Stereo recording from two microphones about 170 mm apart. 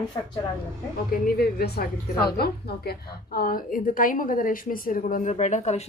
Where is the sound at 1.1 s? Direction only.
60° left (ahead or behind).